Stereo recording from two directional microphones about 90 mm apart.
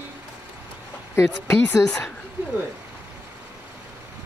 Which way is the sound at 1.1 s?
30° left (ahead or behind).